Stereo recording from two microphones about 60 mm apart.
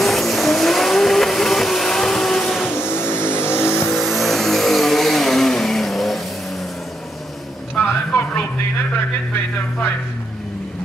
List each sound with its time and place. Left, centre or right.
0.0 s vehicle: centre
2.7 s vehicle: left
3.8 s vehicle: centre
7.7 s a sound: left